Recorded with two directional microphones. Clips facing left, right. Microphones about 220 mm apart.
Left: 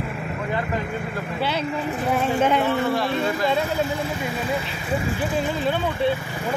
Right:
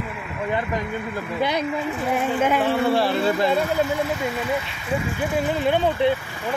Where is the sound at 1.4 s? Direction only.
15° right (ahead or behind).